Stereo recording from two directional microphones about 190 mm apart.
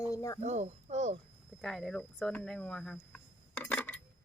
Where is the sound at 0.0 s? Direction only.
15° left (ahead or behind).